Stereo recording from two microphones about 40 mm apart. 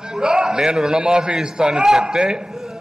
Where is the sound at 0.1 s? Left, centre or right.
Right.